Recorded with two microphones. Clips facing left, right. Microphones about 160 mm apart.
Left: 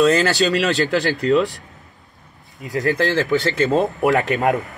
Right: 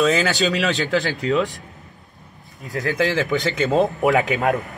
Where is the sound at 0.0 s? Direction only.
Centre (ahead or behind).